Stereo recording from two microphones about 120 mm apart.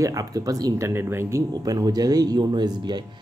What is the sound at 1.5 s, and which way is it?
Speech, 35° right (ahead or behind).